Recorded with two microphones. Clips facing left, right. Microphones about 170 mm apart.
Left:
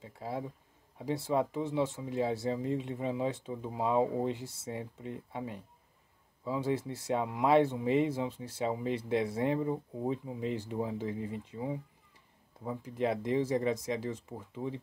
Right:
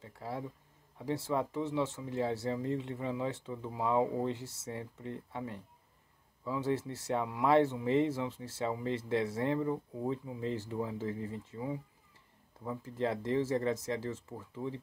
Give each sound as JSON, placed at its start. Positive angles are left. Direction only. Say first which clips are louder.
{"t": 0.0, "sound": "speech", "louder": "left 2 dB", "side_deg": 15}